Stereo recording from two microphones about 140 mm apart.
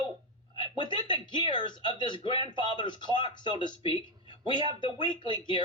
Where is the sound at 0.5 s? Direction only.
35° left (ahead or behind).